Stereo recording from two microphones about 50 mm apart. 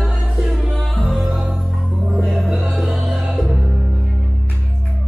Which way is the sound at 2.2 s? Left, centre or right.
Centre.